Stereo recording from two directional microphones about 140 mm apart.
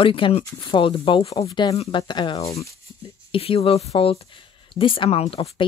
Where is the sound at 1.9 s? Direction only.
35° left (ahead or behind).